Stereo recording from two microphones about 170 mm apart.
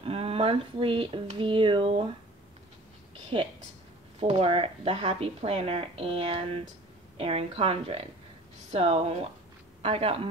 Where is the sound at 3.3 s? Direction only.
35° right (ahead or behind).